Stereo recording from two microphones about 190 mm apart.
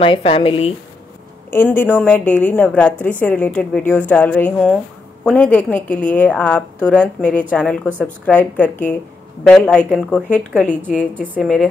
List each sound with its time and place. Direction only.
0.0 s speech: 30° left (ahead or behind)
1.5 s a woman's voice: 10° left (ahead or behind)
11.4 s speech: centre (ahead or behind)